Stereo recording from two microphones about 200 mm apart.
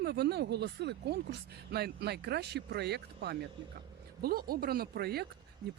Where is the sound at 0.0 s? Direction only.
55° right (ahead or behind).